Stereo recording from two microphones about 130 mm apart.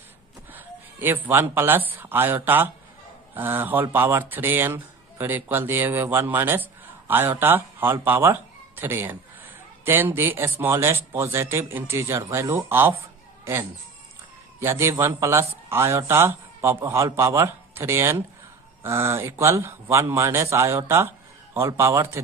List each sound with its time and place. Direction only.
0.5 s a man's voice: 15° right (ahead or behind)